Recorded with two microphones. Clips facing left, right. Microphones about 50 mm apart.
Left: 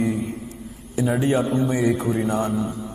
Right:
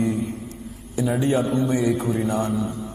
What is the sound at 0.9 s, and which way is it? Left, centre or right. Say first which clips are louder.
A man's voice: left 1 dB; centre.